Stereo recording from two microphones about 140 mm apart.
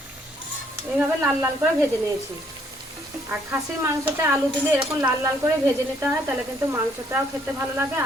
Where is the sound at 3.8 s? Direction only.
20° right (ahead or behind).